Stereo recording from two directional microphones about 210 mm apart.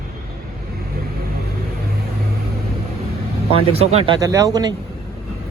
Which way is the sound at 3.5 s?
30° right (ahead or behind).